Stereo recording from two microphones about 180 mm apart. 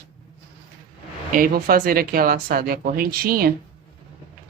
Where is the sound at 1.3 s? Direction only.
50° right (ahead or behind).